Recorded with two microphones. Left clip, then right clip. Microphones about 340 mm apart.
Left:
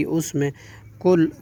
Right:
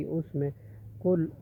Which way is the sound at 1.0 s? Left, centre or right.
Left.